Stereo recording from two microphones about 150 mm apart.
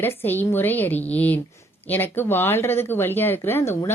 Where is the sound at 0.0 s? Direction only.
15° left (ahead or behind).